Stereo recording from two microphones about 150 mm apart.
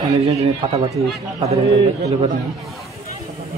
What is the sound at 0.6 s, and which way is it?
Speech, 40° right (ahead or behind).